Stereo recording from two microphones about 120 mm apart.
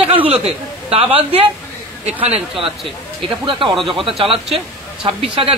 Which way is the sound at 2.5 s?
5° right (ahead or behind).